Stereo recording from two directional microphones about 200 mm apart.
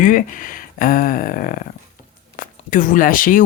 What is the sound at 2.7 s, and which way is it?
Speech, 40° left (ahead or behind).